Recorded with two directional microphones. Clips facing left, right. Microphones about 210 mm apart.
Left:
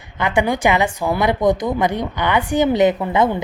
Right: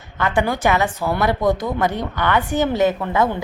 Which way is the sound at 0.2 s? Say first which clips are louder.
Left 2 dB; 15° left (ahead or behind).